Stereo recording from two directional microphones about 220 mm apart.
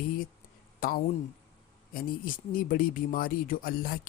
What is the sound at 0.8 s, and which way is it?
Speech, 40° left (ahead or behind).